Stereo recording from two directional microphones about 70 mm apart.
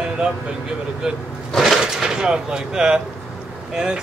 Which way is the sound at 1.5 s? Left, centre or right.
Centre.